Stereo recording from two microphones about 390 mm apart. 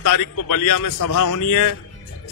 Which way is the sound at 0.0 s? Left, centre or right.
Left.